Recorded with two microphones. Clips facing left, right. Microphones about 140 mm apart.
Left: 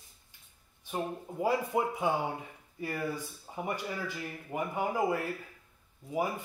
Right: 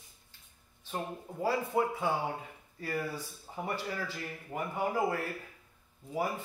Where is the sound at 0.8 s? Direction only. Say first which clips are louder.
Left 3 dB; 15° left (ahead or behind).